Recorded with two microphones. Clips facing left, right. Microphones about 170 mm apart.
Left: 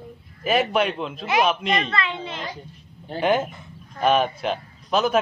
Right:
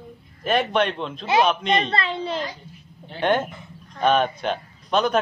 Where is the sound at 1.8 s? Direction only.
35° right (ahead or behind).